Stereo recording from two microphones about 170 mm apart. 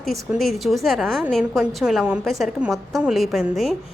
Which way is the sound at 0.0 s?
Centre (ahead or behind).